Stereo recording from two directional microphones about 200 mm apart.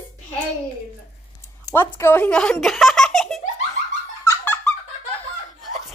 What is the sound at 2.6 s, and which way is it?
Baby laughter, centre (ahead or behind).